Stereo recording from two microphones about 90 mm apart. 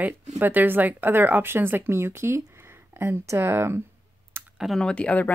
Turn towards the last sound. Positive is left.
turn(degrees=15)  # may be behind; listen again after turning